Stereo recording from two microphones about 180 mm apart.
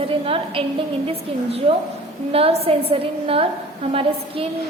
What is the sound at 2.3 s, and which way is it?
A woman's voice, 30° right (ahead or behind).